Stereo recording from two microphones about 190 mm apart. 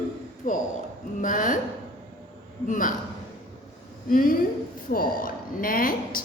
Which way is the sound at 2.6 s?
45° left (ahead or behind).